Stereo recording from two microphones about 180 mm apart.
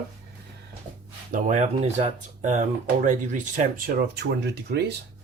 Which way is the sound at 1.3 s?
40° right (ahead or behind).